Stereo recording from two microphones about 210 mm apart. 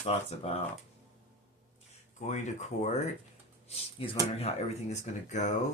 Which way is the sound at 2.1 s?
35° left (ahead or behind).